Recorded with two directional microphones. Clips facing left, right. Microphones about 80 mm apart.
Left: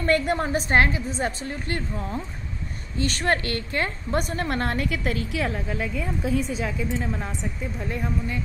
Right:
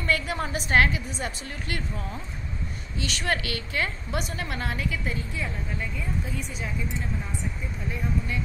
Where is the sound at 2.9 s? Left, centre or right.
Left.